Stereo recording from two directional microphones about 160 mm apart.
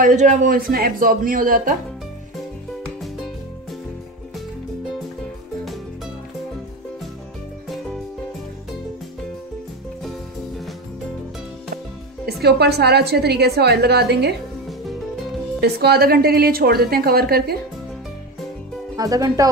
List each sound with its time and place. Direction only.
0.0 s a man's voice: 50° right (ahead or behind)
12.3 s a woman's voice: 90° right
15.6 s a woman's voice: 85° right
18.9 s speech: 20° right (ahead or behind)